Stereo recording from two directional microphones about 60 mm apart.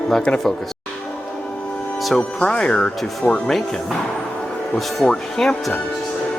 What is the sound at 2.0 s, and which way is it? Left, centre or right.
Music, centre.